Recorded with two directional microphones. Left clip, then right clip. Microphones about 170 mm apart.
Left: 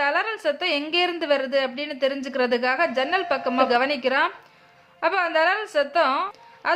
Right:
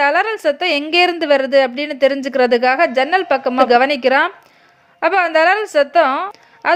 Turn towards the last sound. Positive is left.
turn(degrees=-40)  # may be behind; listen again after turning